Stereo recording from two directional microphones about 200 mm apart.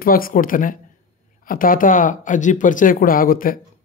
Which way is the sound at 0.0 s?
45° left (ahead or behind).